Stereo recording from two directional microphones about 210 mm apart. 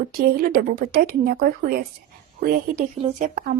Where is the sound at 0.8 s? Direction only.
45° right (ahead or behind).